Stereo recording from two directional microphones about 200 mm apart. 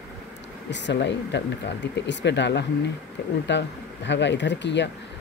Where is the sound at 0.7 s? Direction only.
60° left (ahead or behind).